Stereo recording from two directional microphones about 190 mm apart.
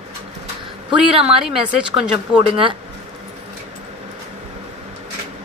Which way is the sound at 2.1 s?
25° right (ahead or behind).